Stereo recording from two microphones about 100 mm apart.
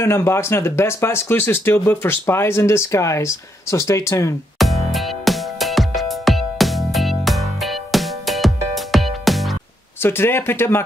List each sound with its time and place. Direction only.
0.0 s speech: 25° left (ahead or behind)
4.6 s music: centre (ahead or behind)
10.0 s speech: 25° left (ahead or behind)